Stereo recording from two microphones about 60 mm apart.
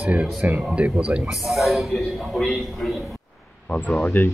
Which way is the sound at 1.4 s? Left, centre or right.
Centre.